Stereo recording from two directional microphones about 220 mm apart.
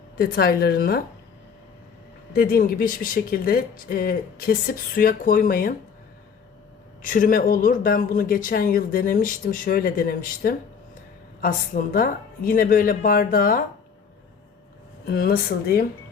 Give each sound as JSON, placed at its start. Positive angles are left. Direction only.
{"t": 0.2, "sound": "speech", "side_deg": 45}
{"t": 2.3, "sound": "speech", "side_deg": 45}
{"t": 7.0, "sound": "speech", "side_deg": 35}
{"t": 15.0, "sound": "speech", "side_deg": 45}